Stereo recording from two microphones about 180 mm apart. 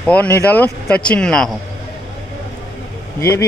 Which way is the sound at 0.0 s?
10° left (ahead or behind).